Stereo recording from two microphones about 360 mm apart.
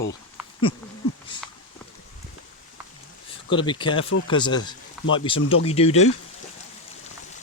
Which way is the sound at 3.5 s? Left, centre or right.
Centre.